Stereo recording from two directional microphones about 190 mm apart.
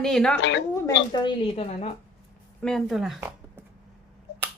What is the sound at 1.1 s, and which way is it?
Speech, 25° left (ahead or behind).